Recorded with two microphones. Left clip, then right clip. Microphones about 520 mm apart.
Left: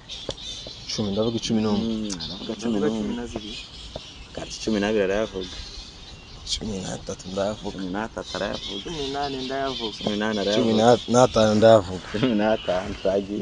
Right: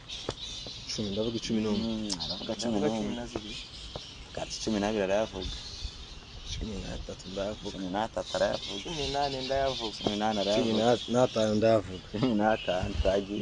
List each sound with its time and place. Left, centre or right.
0.8 s speech: right
2.0 s speech: right
4.5 s speech: right
6.5 s speech: right
7.9 s speech: right
10.5 s speech: right
12.2 s speech: right